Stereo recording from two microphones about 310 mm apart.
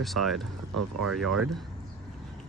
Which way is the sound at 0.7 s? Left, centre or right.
Right.